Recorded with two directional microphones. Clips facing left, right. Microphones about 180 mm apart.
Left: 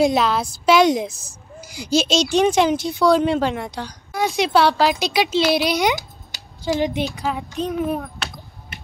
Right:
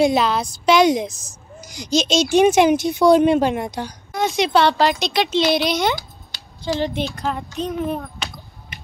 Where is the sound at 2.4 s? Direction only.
15° right (ahead or behind).